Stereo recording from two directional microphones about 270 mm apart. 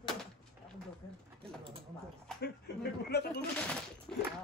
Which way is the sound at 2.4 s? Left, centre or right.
Left.